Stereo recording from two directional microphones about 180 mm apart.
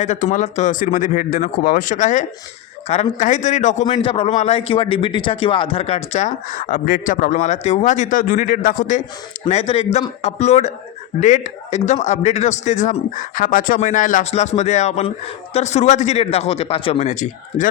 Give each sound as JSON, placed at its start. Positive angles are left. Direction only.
{"t": 0.0, "sound": "a man's voice", "side_deg": 40}
{"t": 9.5, "sound": "a man's voice", "side_deg": 35}